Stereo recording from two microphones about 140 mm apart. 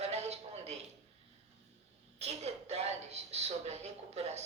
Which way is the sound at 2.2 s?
50° right (ahead or behind).